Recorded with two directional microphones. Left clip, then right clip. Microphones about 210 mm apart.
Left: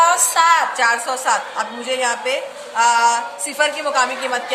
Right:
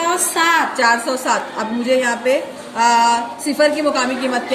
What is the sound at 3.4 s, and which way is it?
A woman's voice, 35° left (ahead or behind).